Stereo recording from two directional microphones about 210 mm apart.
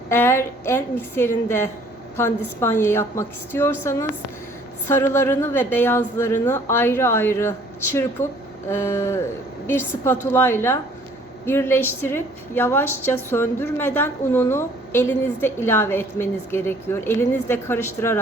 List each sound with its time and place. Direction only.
0.1 s a woman's voice: 10° left (ahead or behind)
8.2 s speech: 35° left (ahead or behind)
8.7 s a woman's voice: 10° left (ahead or behind)